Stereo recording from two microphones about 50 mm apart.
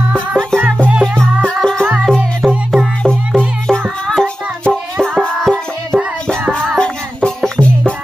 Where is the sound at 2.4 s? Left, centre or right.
Centre.